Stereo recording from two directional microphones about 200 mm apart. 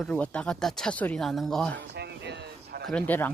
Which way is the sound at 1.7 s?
55° right (ahead or behind).